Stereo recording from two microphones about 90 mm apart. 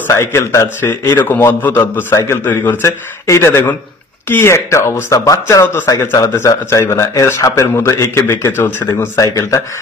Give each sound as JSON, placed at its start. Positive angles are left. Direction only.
{"t": 0.1, "sound": "a man's voice", "side_deg": 30}
{"t": 8.5, "sound": "a man's voice", "side_deg": 25}
{"t": 9.1, "sound": "speech", "side_deg": 35}